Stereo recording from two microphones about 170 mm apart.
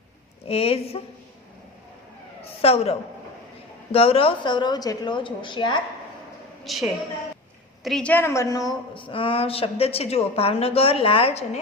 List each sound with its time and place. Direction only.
0.4 s a woman's voice: 35° left (ahead or behind)
2.4 s a woman's voice: 35° left (ahead or behind)
6.7 s a woman's voice: centre (ahead or behind); by 11.6 s 40° left (ahead or behind)